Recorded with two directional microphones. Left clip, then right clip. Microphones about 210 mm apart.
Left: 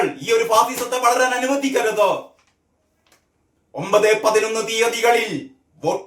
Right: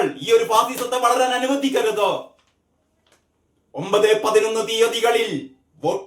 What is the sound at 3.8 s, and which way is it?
Speech, 5° left (ahead or behind).